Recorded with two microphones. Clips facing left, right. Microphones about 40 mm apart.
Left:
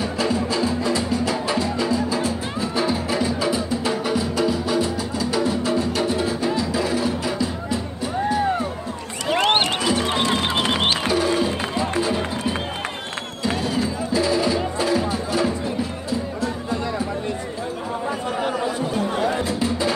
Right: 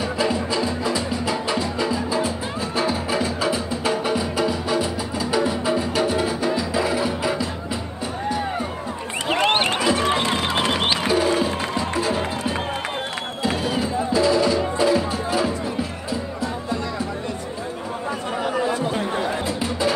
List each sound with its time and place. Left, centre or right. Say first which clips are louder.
0.0 s music: even; centre
11.1 s music: right 1 dB; centre
13.4 s music: even; centre
14.1 s music: right 2 dB; centre
18.9 s music: left 2 dB; right
19.3 s music: left 2 dB; centre